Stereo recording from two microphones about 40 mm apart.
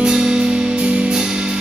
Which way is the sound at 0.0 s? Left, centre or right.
Centre.